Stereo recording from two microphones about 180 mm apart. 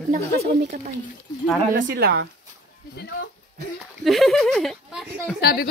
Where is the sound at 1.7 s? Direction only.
60° right (ahead or behind).